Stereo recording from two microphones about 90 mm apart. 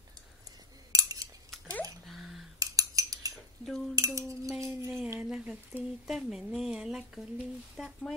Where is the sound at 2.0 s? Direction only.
Centre (ahead or behind).